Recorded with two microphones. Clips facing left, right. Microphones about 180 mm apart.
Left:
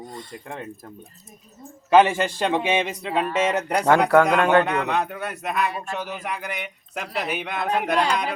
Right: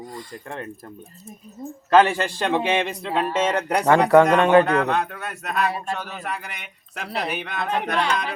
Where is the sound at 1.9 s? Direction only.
15° left (ahead or behind).